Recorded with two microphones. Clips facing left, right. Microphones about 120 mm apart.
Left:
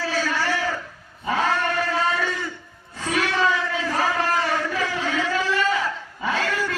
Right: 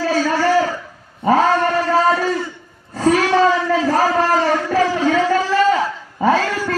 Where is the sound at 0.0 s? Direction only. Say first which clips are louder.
Right 8 dB; 40° right (ahead or behind).